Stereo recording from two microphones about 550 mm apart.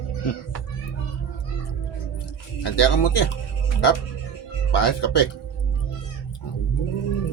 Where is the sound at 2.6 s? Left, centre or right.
Left.